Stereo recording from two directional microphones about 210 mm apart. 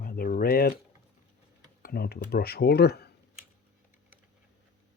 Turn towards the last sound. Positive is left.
turn(degrees=50)  # may be behind; listen again after turning